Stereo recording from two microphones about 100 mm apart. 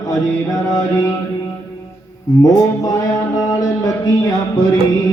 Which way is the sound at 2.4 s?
35° left (ahead or behind).